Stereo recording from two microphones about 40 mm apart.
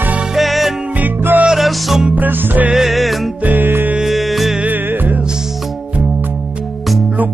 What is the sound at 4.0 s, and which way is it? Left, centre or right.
Music, centre.